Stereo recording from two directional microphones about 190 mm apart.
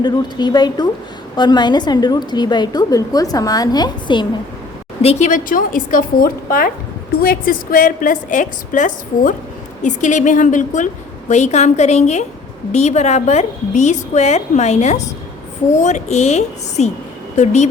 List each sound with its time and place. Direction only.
0.0 s a woman's voice: 20° left (ahead or behind)
5.0 s a woman's voice: 40° left (ahead or behind)